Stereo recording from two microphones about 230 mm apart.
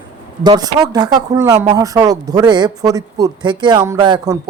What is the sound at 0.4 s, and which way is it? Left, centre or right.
Speech, centre.